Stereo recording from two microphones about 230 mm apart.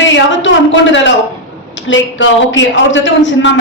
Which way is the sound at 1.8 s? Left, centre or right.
Left.